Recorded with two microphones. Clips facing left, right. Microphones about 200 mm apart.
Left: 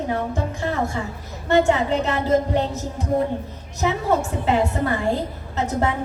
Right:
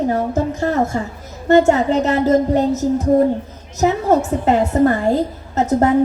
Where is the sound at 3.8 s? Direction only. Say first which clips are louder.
Right 6 dB; 40° right (ahead or behind).